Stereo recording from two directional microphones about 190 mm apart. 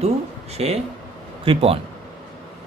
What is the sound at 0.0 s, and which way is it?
Speech, 35° right (ahead or behind).